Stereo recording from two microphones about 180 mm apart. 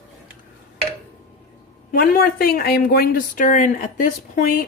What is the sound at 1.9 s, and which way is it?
Speech, 55° left (ahead or behind).